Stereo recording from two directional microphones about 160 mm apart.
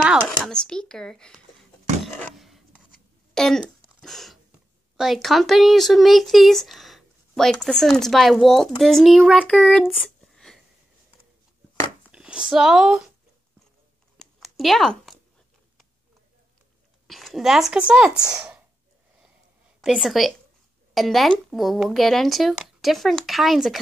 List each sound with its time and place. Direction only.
0.1 s speech: centre (ahead or behind)
2.1 s a sound: 5° left (ahead or behind)
4.9 s speech: centre (ahead or behind)
12.1 s speech: 5° right (ahead or behind)
14.1 s a sound: centre (ahead or behind)
17.1 s speech: centre (ahead or behind)
18.2 s speech: 20° right (ahead or behind)
19.8 s speech: centre (ahead or behind)